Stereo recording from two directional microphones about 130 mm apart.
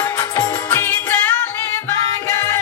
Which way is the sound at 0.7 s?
15° left (ahead or behind).